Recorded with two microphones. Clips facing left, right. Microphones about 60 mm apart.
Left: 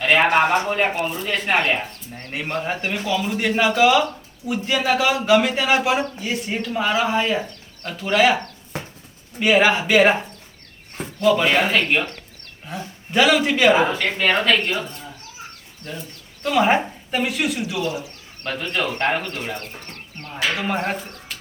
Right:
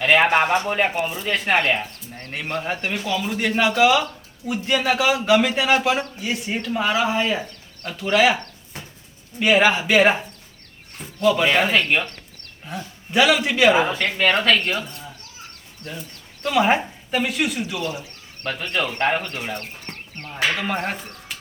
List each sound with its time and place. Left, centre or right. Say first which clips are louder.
0.0 s speech: even; centre
2.1 s speech: left 1 dB; centre
9.4 s speech: even; centre
16.5 s speech: left 1 dB; centre
17.6 s speech: left 2 dB; centre
18.8 s speech: even; centre
19.9 s chicken: right 1 dB; right
20.3 s speech: even; centre